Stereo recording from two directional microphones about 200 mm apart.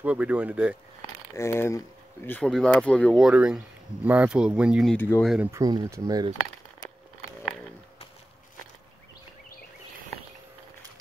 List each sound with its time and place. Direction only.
0.0 s speech: 5° right (ahead or behind)
1.3 s speech: 15° left (ahead or behind); by 5.5 s centre (ahead or behind)
5.5 s speech: 20° right (ahead or behind)